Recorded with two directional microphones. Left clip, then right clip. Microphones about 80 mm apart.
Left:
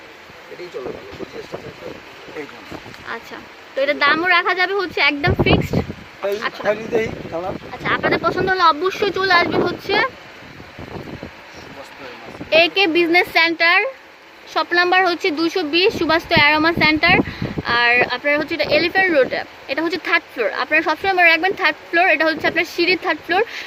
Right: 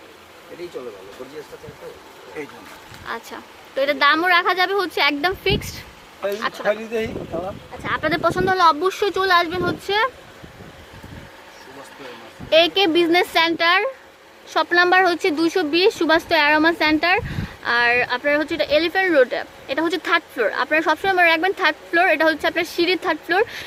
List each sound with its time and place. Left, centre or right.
3.1 s speech: right
8.0 s speech: right
12.5 s speech: right